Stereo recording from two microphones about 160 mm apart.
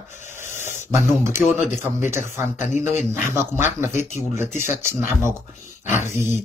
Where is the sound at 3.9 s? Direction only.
45° left (ahead or behind).